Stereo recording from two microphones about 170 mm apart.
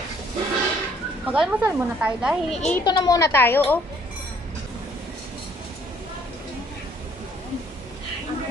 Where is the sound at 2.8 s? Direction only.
25° left (ahead or behind).